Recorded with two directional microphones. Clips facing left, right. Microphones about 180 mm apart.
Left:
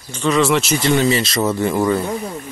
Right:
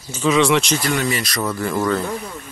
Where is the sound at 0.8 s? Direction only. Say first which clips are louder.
Left 5 dB; 25° left (ahead or behind).